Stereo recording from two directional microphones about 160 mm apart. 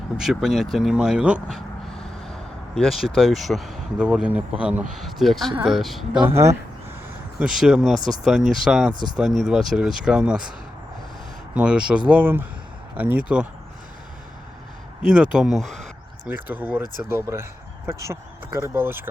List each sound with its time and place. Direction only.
0.2 s speech: centre (ahead or behind)
6.2 s speech: 15° right (ahead or behind)
7.6 s speech: centre (ahead or behind)
11.5 s speech: 5° right (ahead or behind)
15.1 s speech: 5° right (ahead or behind)
16.2 s speech: 10° right (ahead or behind)